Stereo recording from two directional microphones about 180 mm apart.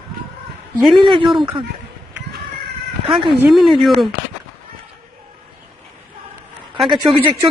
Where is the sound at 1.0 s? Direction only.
25° right (ahead or behind).